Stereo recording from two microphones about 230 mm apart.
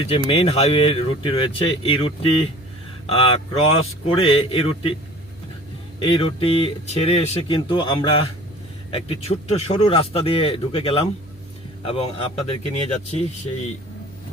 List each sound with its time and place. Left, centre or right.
0.0 s speech: left
6.0 s speech: left